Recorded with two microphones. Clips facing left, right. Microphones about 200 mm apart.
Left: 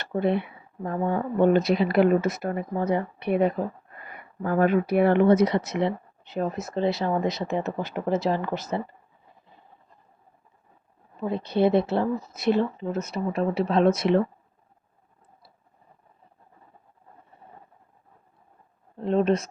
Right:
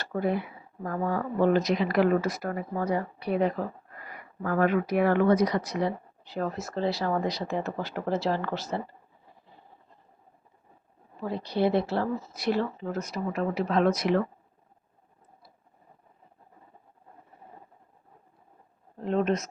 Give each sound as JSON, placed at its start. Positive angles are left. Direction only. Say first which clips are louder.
{"t": 0.0, "sound": "speech", "louder": "left 3 dB", "side_deg": 25}
{"t": 11.2, "sound": "speech", "louder": "left 4 dB", "side_deg": 20}
{"t": 19.0, "sound": "speech", "louder": "left 4 dB", "side_deg": 30}